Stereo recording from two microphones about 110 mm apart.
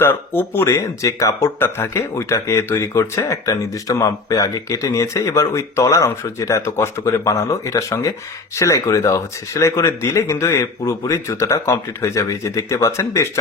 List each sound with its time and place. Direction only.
0.0 s speech: 20° left (ahead or behind)